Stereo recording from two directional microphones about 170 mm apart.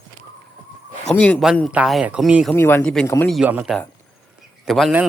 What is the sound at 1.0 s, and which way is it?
Speech, 10° left (ahead or behind).